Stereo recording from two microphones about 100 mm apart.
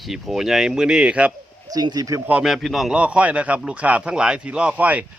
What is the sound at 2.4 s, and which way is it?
A man's voice, centre (ahead or behind).